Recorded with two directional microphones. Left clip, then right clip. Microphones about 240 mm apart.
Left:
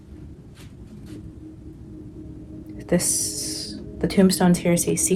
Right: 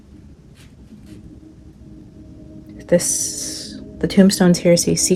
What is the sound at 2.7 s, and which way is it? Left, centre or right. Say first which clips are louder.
Speech: right 7 dB; right.